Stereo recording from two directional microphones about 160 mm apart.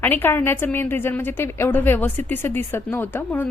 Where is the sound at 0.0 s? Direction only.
15° left (ahead or behind).